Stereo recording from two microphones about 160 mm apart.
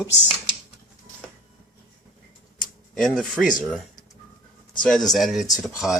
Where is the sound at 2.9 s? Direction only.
5° left (ahead or behind).